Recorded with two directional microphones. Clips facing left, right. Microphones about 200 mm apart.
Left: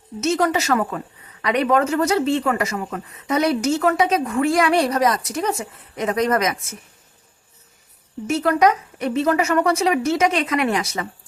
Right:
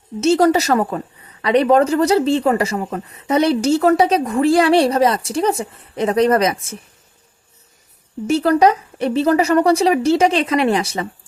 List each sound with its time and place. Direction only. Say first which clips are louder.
0.2 s a woman's voice: right 6 dB; 30° right (ahead or behind)
8.3 s a woman's voice: right 4 dB; 30° right (ahead or behind)